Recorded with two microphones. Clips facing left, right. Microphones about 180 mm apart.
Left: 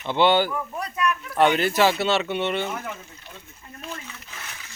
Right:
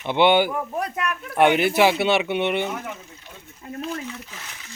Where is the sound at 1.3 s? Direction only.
15° right (ahead or behind).